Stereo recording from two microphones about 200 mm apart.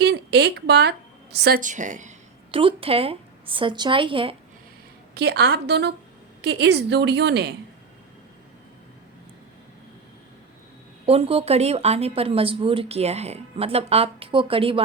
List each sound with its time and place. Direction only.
0.0 s a woman's voice: 55° right (ahead or behind); by 4.4 s 25° right (ahead or behind)
5.1 s a woman's voice: 55° right (ahead or behind)
11.0 s speech: 30° right (ahead or behind)